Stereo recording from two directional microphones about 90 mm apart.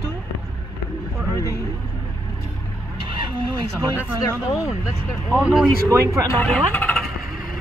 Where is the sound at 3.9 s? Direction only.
20° right (ahead or behind).